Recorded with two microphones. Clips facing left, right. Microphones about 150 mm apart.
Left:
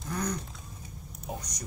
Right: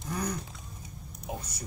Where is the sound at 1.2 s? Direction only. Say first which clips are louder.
Even; 5° right (ahead or behind).